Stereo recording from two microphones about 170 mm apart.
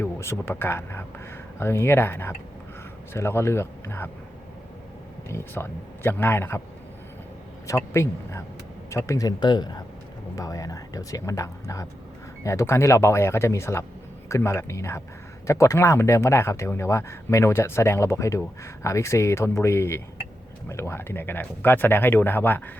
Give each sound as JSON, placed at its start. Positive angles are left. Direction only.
{"t": 0.0, "sound": "speech", "side_deg": 15}
{"t": 5.3, "sound": "speech", "side_deg": 15}
{"t": 7.9, "sound": "speech", "side_deg": 15}